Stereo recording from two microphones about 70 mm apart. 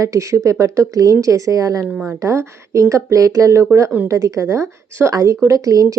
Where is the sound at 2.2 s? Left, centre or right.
Right.